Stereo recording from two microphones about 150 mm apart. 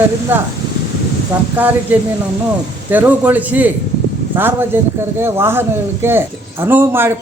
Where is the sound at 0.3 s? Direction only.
15° right (ahead or behind).